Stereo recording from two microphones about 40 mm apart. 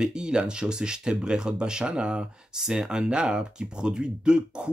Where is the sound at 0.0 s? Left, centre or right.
Right.